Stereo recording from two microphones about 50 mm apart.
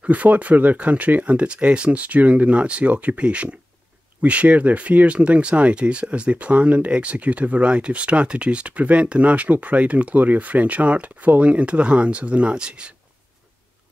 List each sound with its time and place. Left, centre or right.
0.0 s speech: right